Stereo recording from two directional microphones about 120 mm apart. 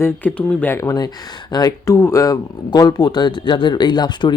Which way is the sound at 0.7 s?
25° left (ahead or behind).